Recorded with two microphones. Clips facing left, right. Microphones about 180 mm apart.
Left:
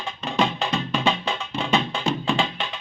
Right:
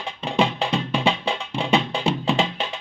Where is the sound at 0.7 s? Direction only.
15° right (ahead or behind).